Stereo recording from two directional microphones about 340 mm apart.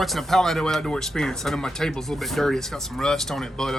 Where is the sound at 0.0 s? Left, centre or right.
Centre.